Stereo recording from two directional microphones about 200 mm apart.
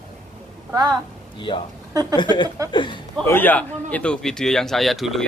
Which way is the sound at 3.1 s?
10° left (ahead or behind).